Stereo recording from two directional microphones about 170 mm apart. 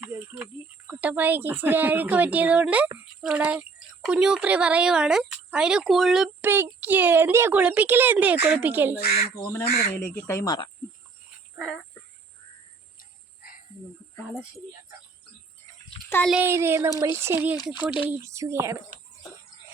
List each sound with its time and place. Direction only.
1.0 s a woman's voice: 10° right (ahead or behind)
9.0 s speech: 65° left (ahead or behind)
9.4 s speech: 15° left (ahead or behind)
9.6 s speech: 60° left (ahead or behind)
9.9 s speech: 10° left (ahead or behind)
11.5 s frog: centre (ahead or behind)
16.0 s a child's voice: 10° left (ahead or behind)
16.3 s a woman's voice: 15° right (ahead or behind)